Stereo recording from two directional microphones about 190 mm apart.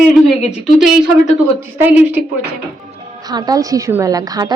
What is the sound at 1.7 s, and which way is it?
Speech, 10° right (ahead or behind).